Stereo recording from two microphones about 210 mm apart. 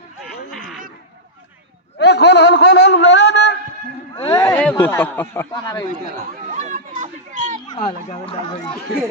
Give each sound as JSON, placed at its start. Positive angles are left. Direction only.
{"t": 2.0, "sound": "a sound", "side_deg": 50}
{"t": 4.1, "sound": "speech", "side_deg": 15}
{"t": 6.3, "sound": "children playing", "side_deg": -35}
{"t": 7.7, "sound": "speech", "side_deg": 25}